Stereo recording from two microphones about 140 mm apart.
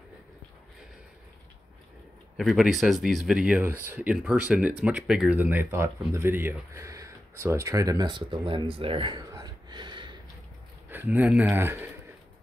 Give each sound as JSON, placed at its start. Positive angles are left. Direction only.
{"t": 2.3, "sound": "speech", "side_deg": 0}
{"t": 9.3, "sound": "a sound", "side_deg": -30}
{"t": 10.9, "sound": "speech", "side_deg": -15}